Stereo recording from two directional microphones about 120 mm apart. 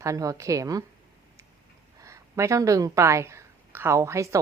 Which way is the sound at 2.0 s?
25° right (ahead or behind).